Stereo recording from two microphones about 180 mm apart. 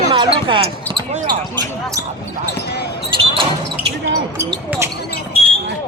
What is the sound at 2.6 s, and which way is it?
Speech, 65° left (ahead or behind).